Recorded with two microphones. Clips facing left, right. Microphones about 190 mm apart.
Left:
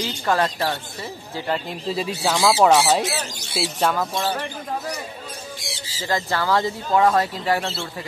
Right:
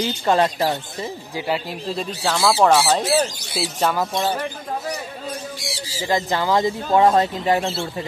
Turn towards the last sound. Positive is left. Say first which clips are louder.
# right 3 dB
turn(degrees=-20)  # may be behind; listen again after turning